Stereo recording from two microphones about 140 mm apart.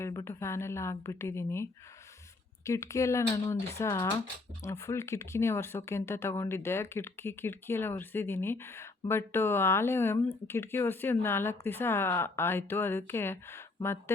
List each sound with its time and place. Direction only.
0.0 s a woman's voice: 25° left (ahead or behind)
2.6 s a woman's voice: 20° left (ahead or behind)